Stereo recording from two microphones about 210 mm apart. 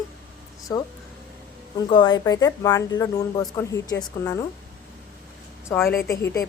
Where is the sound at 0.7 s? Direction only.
15° left (ahead or behind).